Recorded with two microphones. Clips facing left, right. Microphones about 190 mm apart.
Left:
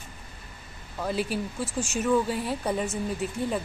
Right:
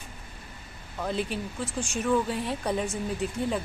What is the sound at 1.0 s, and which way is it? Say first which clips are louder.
A woman's voice: left 2 dB; 5° left (ahead or behind).